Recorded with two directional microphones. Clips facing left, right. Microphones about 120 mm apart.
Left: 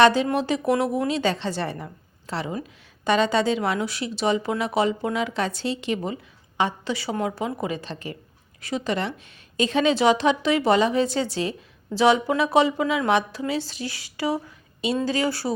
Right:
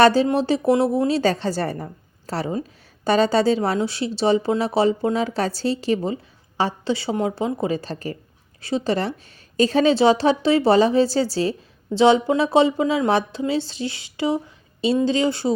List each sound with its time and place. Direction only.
0.0 s a woman's voice: 35° right (ahead or behind)